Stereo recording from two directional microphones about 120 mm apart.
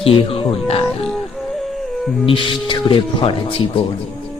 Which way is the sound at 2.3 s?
45° left (ahead or behind).